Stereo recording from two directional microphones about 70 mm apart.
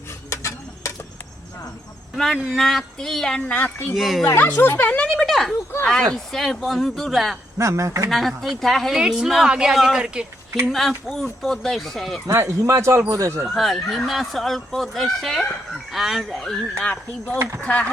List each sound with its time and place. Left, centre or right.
0.3 s a sound: left
2.1 s speech: centre
3.5 s speech: left
3.9 s speech: centre
4.4 s speech: left
5.0 s speech: centre
7.6 s speech: right
8.1 s speech: centre
9.7 s speech: centre
12.3 s a man's voice: right
13.5 s speech: centre
16.4 s speech: centre
17.3 s a man's voice: right
17.6 s speech: left